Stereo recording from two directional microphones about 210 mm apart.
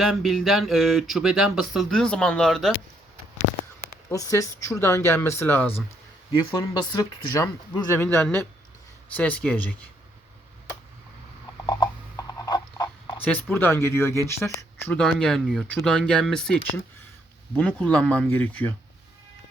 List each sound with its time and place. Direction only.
0.0 s speech: centre (ahead or behind)
4.1 s speech: 15° left (ahead or behind)
6.5 s speech: 20° left (ahead or behind)
11.6 s a sound: 20° left (ahead or behind)
14.8 s speech: 5° left (ahead or behind)
17.6 s speech: 5° left (ahead or behind)